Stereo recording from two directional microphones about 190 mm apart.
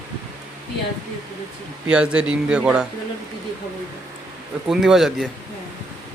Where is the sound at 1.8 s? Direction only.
5° right (ahead or behind).